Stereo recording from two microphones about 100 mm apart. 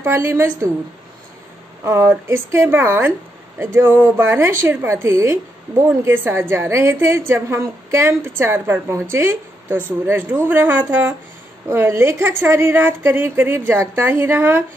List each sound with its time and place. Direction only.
0.0 s a woman's voice: 30° right (ahead or behind)
1.9 s a woman's voice: 30° right (ahead or behind)